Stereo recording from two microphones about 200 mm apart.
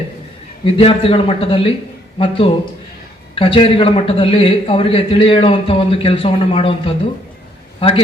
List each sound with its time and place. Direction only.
0.6 s a man's voice: 30° left (ahead or behind)